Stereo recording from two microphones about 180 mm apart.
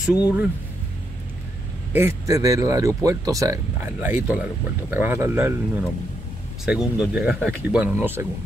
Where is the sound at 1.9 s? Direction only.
15° right (ahead or behind).